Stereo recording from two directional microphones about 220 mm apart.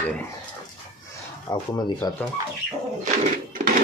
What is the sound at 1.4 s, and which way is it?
Speech, 20° left (ahead or behind).